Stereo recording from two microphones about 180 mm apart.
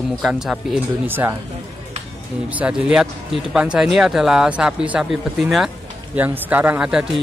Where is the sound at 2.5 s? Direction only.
10° right (ahead or behind).